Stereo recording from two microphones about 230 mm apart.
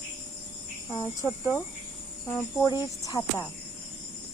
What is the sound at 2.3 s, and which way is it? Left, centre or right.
Cricket, centre.